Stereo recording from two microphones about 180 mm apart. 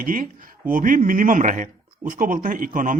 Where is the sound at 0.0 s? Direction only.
50° right (ahead or behind).